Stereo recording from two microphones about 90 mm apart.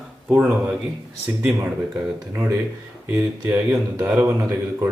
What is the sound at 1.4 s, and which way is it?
Speech, 15° right (ahead or behind).